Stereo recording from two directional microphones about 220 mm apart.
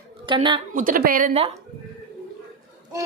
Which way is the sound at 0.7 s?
40° right (ahead or behind).